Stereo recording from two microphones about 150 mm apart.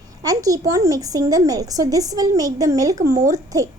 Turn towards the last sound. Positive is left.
turn(degrees=-25)  # may be behind; listen again after turning